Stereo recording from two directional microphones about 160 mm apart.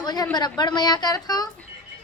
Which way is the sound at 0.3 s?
25° left (ahead or behind).